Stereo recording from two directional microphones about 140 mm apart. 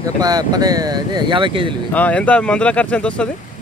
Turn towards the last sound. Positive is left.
turn(degrees=10)  # may be behind; listen again after turning